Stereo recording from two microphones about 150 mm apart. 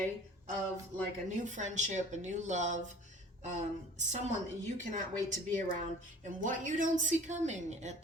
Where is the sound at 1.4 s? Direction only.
55° right (ahead or behind).